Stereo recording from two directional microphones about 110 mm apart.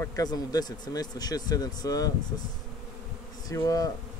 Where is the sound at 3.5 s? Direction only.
35° left (ahead or behind).